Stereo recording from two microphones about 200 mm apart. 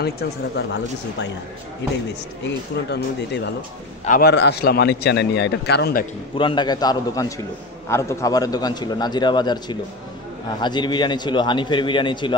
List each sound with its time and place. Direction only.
0.0 s a man's voice: 55° left (ahead or behind)
2.4 s a man's voice: 60° left (ahead or behind)
4.0 s a man's voice: 45° left (ahead or behind)
6.3 s a man's voice: 25° left (ahead or behind)